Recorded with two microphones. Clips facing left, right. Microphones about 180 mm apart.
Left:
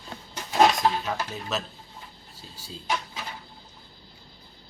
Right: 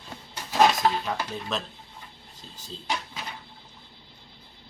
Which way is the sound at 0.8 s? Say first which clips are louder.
Even; centre (ahead or behind).